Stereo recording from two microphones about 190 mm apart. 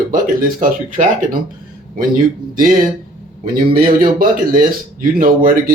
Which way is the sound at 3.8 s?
50° right (ahead or behind).